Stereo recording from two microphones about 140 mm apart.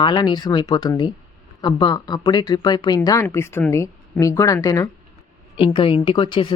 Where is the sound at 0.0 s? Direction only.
35° left (ahead or behind).